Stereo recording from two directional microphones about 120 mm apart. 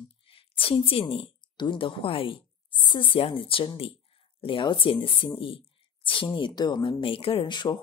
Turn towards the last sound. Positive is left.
turn(degrees=40)  # may be behind; listen again after turning